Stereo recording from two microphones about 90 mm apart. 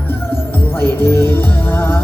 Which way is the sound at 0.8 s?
25° left (ahead or behind).